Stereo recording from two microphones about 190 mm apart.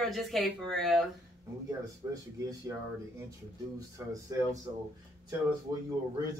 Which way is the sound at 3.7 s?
15° right (ahead or behind).